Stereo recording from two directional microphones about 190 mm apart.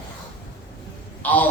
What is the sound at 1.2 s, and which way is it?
Speech, 10° left (ahead or behind).